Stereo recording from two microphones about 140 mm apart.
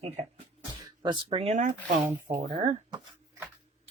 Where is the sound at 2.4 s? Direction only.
55° right (ahead or behind).